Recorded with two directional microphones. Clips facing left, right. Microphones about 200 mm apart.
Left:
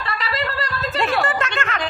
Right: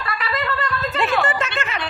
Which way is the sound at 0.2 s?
30° left (ahead or behind).